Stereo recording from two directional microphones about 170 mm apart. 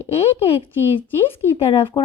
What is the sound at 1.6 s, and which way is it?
Speech, 30° left (ahead or behind).